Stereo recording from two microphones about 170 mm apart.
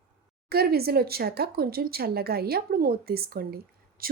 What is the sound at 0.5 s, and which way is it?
A woman's voice, 65° right (ahead or behind).